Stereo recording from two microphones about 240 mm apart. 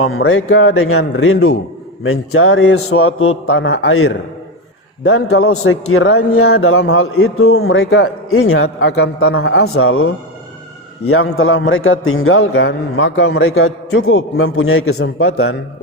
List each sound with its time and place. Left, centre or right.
0.0 s a man's voice: left
9.6 s a man's voice: left